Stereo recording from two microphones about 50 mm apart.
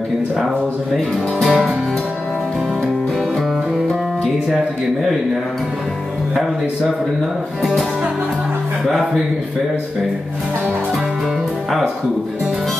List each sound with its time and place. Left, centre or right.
1.4 s music: centre